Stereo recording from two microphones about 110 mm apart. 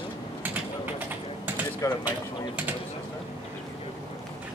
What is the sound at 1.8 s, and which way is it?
Speech, 30° left (ahead or behind).